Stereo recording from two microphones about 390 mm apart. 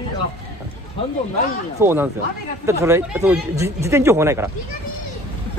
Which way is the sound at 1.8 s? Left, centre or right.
Centre.